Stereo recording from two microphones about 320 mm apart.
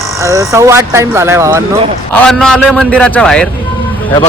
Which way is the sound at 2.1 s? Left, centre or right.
Centre.